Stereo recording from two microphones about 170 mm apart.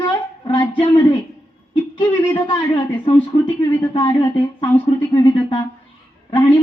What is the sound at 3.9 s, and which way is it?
Speech, 25° left (ahead or behind).